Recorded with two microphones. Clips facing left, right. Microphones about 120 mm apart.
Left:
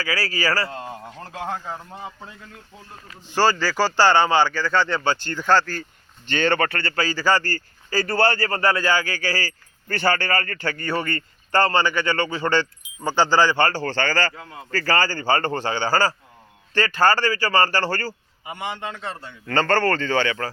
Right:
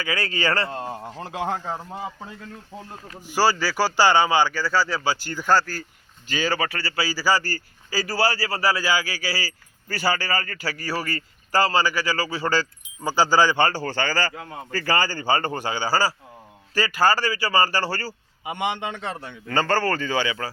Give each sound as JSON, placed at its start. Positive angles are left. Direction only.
{"t": 0.0, "sound": "speech", "side_deg": -20}
{"t": 3.2, "sound": "a man's voice", "side_deg": -10}
{"t": 18.6, "sound": "a man's voice", "side_deg": -70}
{"t": 19.5, "sound": "a man's voice", "side_deg": -10}